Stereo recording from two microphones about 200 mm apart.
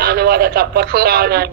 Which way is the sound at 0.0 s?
50° right (ahead or behind).